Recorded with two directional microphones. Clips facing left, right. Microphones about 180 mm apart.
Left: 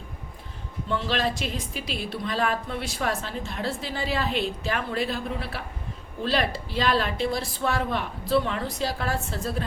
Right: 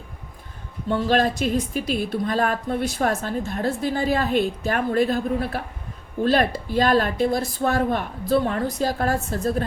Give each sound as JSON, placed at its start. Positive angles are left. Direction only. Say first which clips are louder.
{"t": 0.9, "sound": "a woman's voice", "louder": "right 6 dB", "side_deg": -45}